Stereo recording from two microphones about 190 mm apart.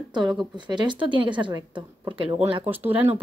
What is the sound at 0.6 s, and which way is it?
Speech, 25° right (ahead or behind).